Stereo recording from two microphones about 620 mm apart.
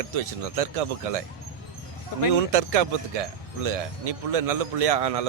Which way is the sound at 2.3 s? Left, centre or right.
Right.